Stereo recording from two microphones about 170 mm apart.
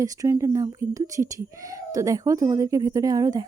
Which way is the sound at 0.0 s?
20° right (ahead or behind).